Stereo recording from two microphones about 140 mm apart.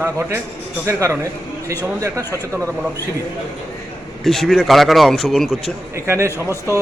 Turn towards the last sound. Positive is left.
turn(degrees=20)  # may be behind; listen again after turning